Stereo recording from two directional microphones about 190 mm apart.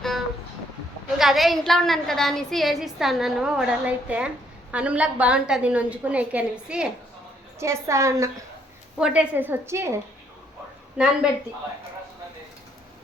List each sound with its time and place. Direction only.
1.2 s a woman's voice: centre (ahead or behind); by 8.3 s 15° right (ahead or behind)
9.0 s a woman's voice: 5° right (ahead or behind)